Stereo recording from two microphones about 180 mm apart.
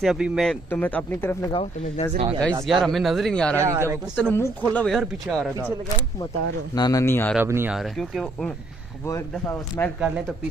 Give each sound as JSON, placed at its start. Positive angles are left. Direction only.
{"t": 0.0, "sound": "speech", "side_deg": -5}
{"t": 0.7, "sound": "speech", "side_deg": 10}
{"t": 1.5, "sound": "speech", "side_deg": 30}
{"t": 2.7, "sound": "speech", "side_deg": 0}
{"t": 3.6, "sound": "speech", "side_deg": -15}
{"t": 4.4, "sound": "speech", "side_deg": 5}
{"t": 6.7, "sound": "speech", "side_deg": 20}
{"t": 7.3, "sound": "speech", "side_deg": -10}
{"t": 7.7, "sound": "speech", "side_deg": 0}
{"t": 9.0, "sound": "speech", "side_deg": 15}
{"t": 9.9, "sound": "speech", "side_deg": -5}